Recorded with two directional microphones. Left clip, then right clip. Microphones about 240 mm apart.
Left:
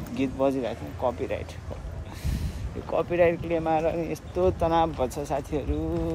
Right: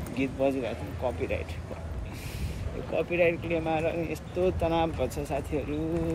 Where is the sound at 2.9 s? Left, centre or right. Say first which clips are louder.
Left 3 dB; left.